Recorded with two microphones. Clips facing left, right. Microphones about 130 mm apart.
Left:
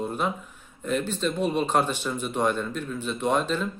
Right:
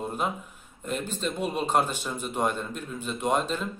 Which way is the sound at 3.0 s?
10° right (ahead or behind).